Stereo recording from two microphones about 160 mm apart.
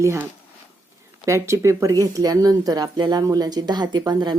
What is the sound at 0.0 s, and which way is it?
Speech, 15° right (ahead or behind).